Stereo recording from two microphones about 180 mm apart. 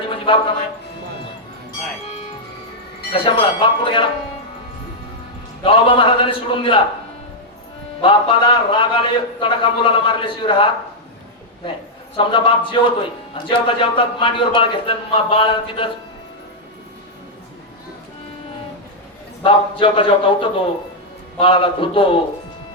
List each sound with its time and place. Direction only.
0.3 s speech: 30° left (ahead or behind)
3.1 s a man's voice: 30° left (ahead or behind)
5.6 s a man's voice: 30° left (ahead or behind)
8.0 s a man's voice: 30° left (ahead or behind)
12.1 s a man's voice: 30° left (ahead or behind)
19.4 s a man's voice: 30° left (ahead or behind)